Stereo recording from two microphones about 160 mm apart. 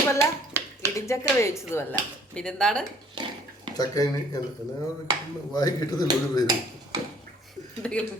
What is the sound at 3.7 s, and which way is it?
Speech, 25° left (ahead or behind).